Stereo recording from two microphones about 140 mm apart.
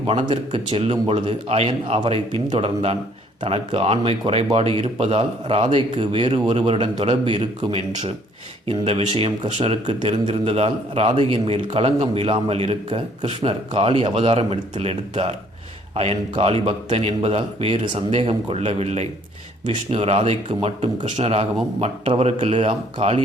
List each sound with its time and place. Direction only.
0.1 s a man's voice: 40° right (ahead or behind)